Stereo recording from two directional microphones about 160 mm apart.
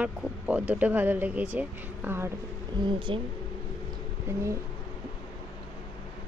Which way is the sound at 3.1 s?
30° right (ahead or behind).